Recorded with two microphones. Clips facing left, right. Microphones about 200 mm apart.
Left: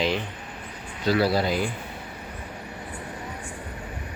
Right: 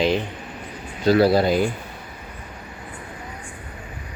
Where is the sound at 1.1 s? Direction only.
45° right (ahead or behind).